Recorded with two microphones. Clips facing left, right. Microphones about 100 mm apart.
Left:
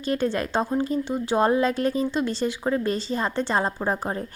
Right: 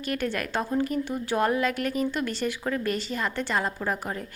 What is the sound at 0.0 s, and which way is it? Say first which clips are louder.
A woman's voice: left 5 dB; 25° left (ahead or behind).